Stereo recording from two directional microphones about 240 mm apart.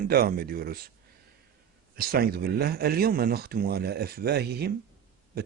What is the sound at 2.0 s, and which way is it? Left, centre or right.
A man's voice, right.